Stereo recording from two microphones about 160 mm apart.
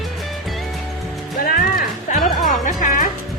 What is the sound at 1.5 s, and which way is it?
Music, 55° left (ahead or behind).